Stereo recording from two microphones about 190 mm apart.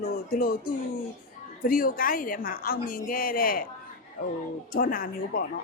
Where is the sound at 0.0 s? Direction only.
50° left (ahead or behind).